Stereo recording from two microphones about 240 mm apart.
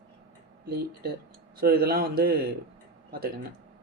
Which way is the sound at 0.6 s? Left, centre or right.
Right.